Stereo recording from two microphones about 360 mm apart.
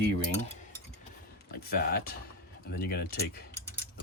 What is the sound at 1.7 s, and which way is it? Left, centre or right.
Speech, left.